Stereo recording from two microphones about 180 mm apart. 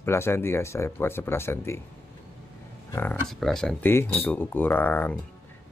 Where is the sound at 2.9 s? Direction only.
10° left (ahead or behind).